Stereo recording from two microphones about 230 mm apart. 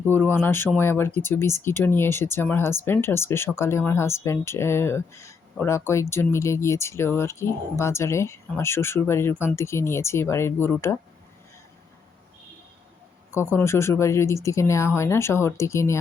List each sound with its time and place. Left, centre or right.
0.0 s speech: centre
13.6 s speech: centre